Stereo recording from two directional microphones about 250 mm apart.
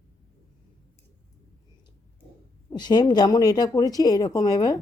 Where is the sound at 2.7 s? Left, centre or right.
Centre.